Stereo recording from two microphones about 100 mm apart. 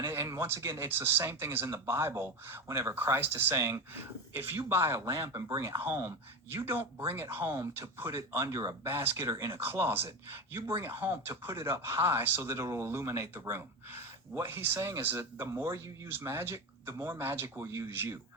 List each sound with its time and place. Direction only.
0.0 s speech: 25° right (ahead or behind)